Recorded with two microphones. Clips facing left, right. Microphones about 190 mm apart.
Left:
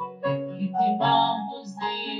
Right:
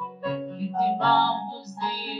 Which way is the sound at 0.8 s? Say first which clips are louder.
Left 1 dB; 25° left (ahead or behind).